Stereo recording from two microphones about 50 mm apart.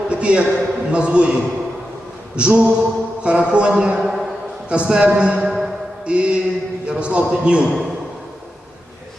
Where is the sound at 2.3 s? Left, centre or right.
Right.